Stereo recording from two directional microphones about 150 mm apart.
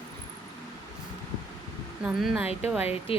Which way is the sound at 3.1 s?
40° left (ahead or behind).